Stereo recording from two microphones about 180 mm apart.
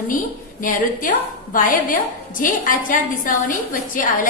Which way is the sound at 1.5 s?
50° left (ahead or behind).